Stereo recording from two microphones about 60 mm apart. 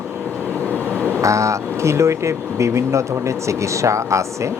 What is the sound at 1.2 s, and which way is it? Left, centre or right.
Speech, right.